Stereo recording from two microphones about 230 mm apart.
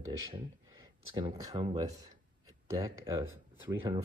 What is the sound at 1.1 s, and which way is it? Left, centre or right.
Speech, right.